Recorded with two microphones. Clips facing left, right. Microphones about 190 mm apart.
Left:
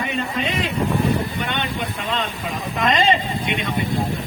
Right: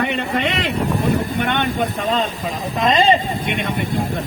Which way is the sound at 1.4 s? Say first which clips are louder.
Right 6 dB; 55° right (ahead or behind).